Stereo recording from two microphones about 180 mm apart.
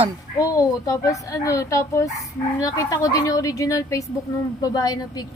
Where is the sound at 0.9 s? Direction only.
20° left (ahead or behind).